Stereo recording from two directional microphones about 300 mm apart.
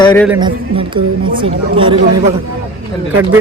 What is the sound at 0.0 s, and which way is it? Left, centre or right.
Speech, centre.